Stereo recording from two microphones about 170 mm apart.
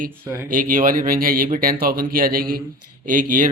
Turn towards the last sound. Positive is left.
turn(degrees=-50)  # may be behind; listen again after turning